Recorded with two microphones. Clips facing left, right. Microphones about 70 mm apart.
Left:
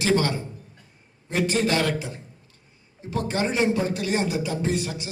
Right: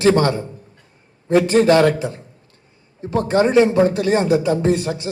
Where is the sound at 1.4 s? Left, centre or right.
Right.